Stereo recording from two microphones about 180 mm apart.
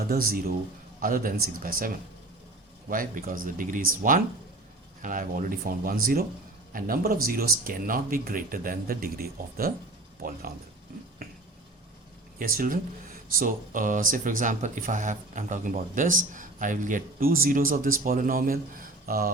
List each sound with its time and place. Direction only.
0.1 s speech: 55° right (ahead or behind)
2.9 s speech: 50° right (ahead or behind)
12.4 s speech: 50° right (ahead or behind)